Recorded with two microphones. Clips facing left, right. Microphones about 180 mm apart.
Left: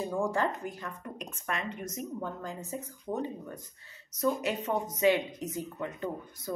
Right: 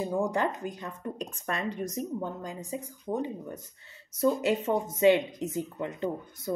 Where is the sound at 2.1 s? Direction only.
15° right (ahead or behind).